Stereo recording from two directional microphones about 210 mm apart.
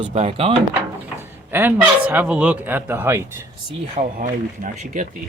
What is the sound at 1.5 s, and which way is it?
Speech, 10° right (ahead or behind).